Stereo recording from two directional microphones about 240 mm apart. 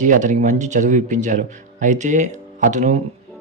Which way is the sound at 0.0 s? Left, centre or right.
Right.